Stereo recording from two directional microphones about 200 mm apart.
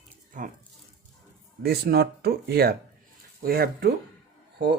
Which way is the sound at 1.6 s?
50° right (ahead or behind).